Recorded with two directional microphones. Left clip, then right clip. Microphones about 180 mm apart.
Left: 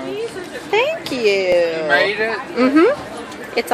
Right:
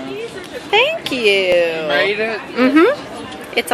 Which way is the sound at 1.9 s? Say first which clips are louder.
Even; 45° right (ahead or behind).